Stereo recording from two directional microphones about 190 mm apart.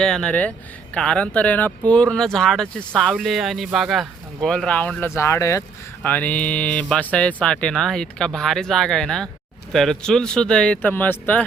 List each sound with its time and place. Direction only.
0.0 s speech: 5° left (ahead or behind)